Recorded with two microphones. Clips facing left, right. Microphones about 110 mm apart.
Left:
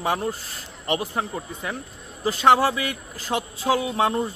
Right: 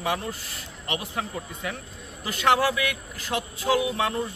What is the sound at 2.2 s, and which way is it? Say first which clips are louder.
Speech: left 4 dB; 30° left (ahead or behind).